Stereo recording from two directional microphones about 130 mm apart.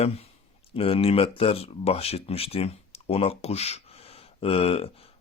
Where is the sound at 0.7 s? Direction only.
45° left (ahead or behind).